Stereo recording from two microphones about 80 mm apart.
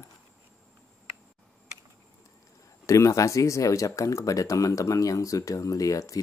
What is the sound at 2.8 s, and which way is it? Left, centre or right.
Speech, left.